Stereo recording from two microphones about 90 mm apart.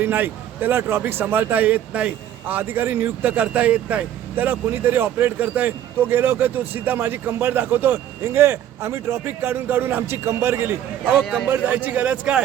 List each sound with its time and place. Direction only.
0.0 s a man's voice: 20° right (ahead or behind)